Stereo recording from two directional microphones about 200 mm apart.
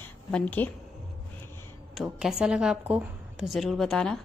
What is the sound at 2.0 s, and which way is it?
A woman's voice, 5° right (ahead or behind).